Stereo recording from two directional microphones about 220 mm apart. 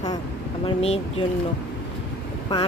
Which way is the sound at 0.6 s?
25° left (ahead or behind).